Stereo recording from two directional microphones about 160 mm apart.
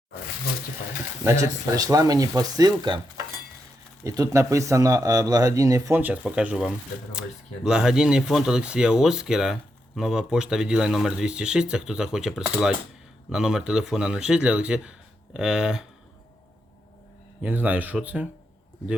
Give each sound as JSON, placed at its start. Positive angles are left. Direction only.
{"t": 1.2, "sound": "speech", "side_deg": -20}
{"t": 4.0, "sound": "speech", "side_deg": -20}
{"t": 17.4, "sound": "speech", "side_deg": -10}